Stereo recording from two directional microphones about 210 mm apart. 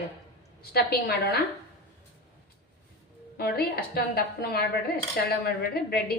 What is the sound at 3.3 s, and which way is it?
A woman's voice, 45° left (ahead or behind).